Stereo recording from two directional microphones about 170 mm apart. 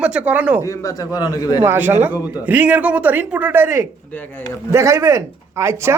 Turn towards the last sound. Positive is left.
turn(degrees=-15)  # may be behind; listen again after turning